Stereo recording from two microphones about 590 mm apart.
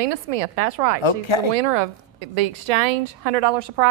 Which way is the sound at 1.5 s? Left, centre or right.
Right.